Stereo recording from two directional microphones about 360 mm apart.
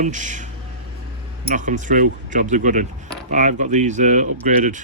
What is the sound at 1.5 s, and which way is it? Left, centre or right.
Speech, right.